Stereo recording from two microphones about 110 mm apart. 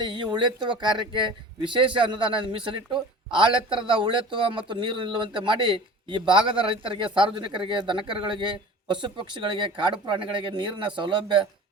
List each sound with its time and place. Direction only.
0.0 s a man's voice: 45° right (ahead or behind)